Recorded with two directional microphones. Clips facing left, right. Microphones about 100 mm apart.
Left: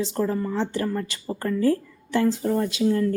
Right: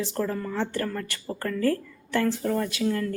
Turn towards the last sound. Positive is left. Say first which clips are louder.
# left 5 dB
turn(degrees=25)  # may be behind; listen again after turning